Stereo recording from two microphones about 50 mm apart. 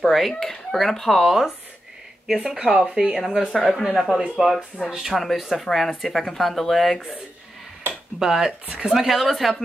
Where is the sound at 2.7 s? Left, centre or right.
Centre.